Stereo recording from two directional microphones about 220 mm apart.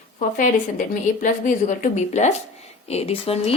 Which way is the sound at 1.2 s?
35° left (ahead or behind).